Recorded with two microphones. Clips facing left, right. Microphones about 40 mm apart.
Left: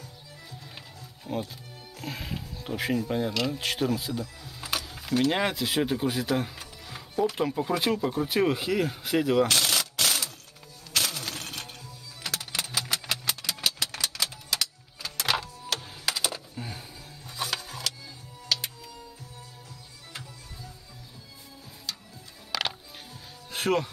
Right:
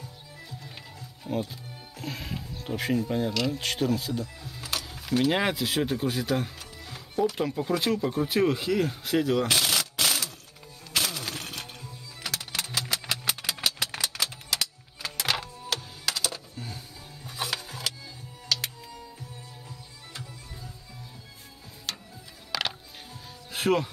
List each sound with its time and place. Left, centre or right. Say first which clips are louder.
1.2 s speech: right 2 dB; centre
4.4 s music: right 1 dB; centre
4.8 s keys jangling: right 2 dB; centre
5.2 s speech: right 1 dB; centre
9.5 s a sound: even; centre
10.9 s music: even; centre
13.0 s vehicle: right 1 dB; centre
13.7 s a sound: right 1 dB; centre
16.2 s a sound: left 1 dB; centre
17.2 s music: even; centre
21.9 s music: right 2 dB; right
22.5 s music: even; centre